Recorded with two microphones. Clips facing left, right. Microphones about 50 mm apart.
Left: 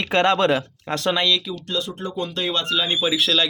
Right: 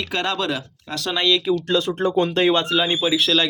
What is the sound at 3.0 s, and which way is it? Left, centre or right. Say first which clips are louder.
Speech: right 1 dB; centre.